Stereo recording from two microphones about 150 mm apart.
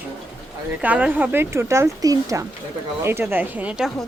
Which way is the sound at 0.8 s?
10° right (ahead or behind).